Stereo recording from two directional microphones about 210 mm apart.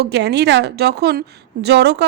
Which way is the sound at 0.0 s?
55° right (ahead or behind).